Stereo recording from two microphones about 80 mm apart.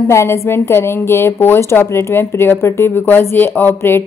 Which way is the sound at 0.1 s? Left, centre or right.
Left.